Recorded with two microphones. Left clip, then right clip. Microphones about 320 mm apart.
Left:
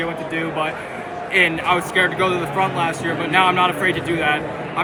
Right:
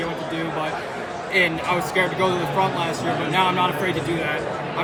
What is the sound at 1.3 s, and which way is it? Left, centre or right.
A man's voice, centre.